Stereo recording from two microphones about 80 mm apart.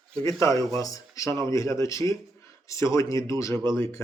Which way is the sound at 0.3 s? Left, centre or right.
Left.